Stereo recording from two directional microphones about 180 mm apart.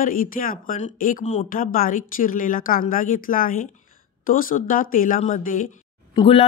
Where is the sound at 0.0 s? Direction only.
50° left (ahead or behind).